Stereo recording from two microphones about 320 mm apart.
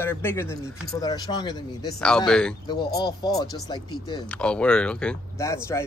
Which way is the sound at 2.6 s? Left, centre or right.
Centre.